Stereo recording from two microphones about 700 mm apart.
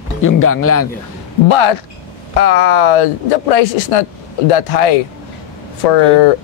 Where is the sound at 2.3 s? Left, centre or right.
Left.